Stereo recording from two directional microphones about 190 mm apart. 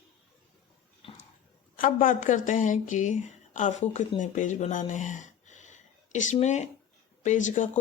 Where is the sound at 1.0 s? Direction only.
30° left (ahead or behind).